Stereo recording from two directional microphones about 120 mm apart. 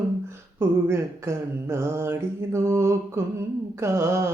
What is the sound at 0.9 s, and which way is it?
Mantra, 20° right (ahead or behind).